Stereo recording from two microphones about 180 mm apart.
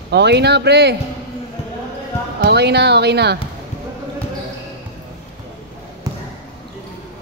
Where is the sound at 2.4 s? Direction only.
70° right (ahead or behind).